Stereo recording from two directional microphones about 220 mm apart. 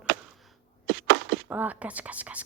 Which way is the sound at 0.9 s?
50° right (ahead or behind).